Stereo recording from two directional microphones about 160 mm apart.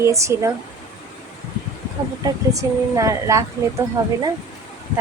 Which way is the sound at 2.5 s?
20° right (ahead or behind).